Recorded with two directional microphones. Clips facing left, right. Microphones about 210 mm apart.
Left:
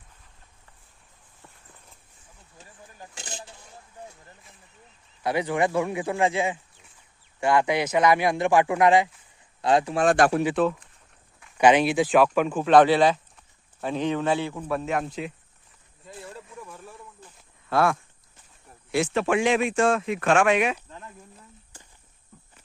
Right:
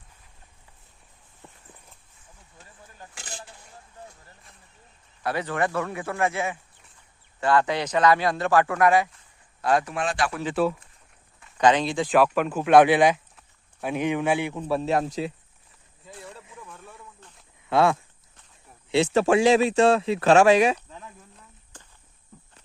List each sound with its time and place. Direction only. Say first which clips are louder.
5.2 s a man's voice: left 2 dB; 15° left (ahead or behind)
10.0 s speech: left 7 dB; 45° left (ahead or behind)
10.5 s a man's voice: even; 5° right (ahead or behind)
11.5 s a man's voice: left 2 dB; 10° left (ahead or behind); by 14.7 s 15° right (ahead or behind)
14.7 s speech: right 4 dB; 30° right (ahead or behind)
16.0 s a sound: left 2 dB; centre (ahead or behind)
16.6 s snake: left 3 dB; centre (ahead or behind)
17.7 s speech: right 2 dB; 20° right (ahead or behind)
19.1 s speech: right 5 dB; 40° right (ahead or behind)
21.7 s cricket: right 5 dB; 10° left (ahead or behind)